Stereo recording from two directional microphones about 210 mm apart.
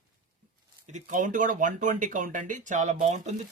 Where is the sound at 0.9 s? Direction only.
35° right (ahead or behind).